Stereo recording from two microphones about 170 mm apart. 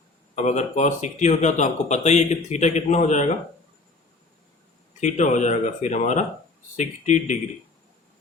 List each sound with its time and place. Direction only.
0.3 s speech: 45° left (ahead or behind)
4.9 s speech: 45° left (ahead or behind)